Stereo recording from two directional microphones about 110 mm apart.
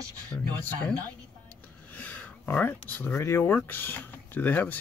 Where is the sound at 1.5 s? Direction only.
15° left (ahead or behind).